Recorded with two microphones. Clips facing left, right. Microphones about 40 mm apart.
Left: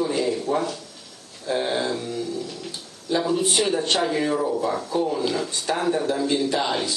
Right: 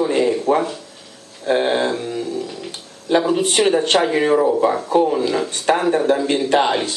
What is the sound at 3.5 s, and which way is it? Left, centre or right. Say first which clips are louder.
Speech: right 6 dB; right.